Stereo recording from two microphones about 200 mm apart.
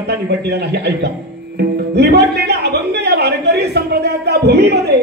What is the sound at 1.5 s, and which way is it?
Music, 55° right (ahead or behind).